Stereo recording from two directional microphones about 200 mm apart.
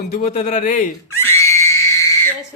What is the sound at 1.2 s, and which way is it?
Screaming, 15° left (ahead or behind).